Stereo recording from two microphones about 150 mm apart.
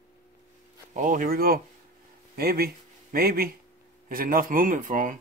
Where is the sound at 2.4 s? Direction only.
90° right.